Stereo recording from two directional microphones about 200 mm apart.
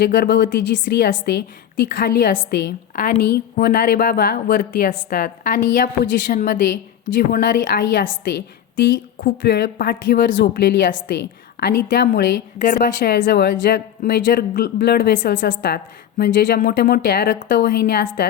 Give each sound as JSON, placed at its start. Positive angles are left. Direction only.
{"t": 0.0, "sound": "a woman's voice", "side_deg": 55}
{"t": 13.1, "sound": "a woman's voice", "side_deg": 60}
{"t": 15.4, "sound": "a woman's voice", "side_deg": 55}